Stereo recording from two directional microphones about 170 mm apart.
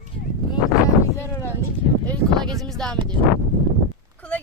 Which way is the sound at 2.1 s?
5° left (ahead or behind).